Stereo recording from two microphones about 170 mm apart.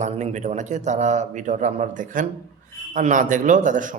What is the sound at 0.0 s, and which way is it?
A man's voice, 45° right (ahead or behind).